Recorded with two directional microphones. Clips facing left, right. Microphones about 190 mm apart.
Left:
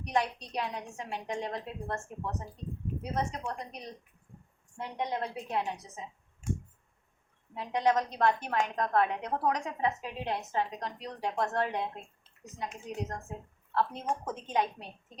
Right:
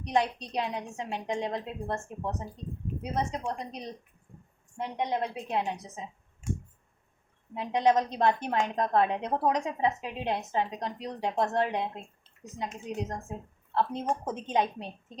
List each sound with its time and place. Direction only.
0.0 s a woman's voice: 20° right (ahead or behind)
7.5 s a woman's voice: 20° right (ahead or behind)